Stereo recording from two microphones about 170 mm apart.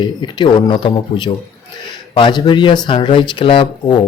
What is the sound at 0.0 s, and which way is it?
Speech, 25° left (ahead or behind).